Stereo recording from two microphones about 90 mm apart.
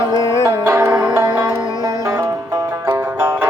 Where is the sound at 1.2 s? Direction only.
55° right (ahead or behind).